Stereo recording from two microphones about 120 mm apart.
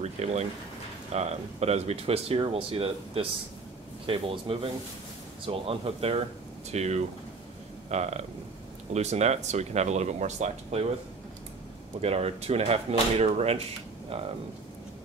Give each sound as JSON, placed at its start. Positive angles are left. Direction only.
{"t": 0.0, "sound": "speech", "side_deg": -65}
{"t": 6.7, "sound": "speech", "side_deg": -65}
{"t": 12.0, "sound": "speech", "side_deg": -60}